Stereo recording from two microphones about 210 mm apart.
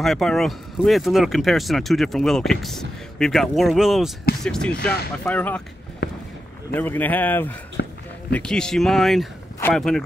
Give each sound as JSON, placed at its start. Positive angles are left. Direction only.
{"t": 0.0, "sound": "a man's voice", "side_deg": 0}
{"t": 6.0, "sound": "run", "side_deg": 50}
{"t": 6.7, "sound": "a man's voice", "side_deg": 10}
{"t": 7.8, "sound": "a sound", "side_deg": 55}
{"t": 8.3, "sound": "speech", "side_deg": 5}